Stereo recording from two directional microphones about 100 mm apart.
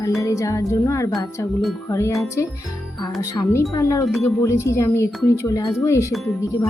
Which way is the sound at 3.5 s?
30° left (ahead or behind).